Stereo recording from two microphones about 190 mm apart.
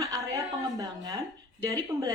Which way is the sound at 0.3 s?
20° right (ahead or behind).